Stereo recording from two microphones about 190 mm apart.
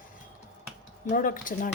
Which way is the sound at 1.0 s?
45° left (ahead or behind).